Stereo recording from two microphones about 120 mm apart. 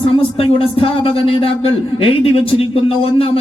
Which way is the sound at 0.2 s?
50° left (ahead or behind).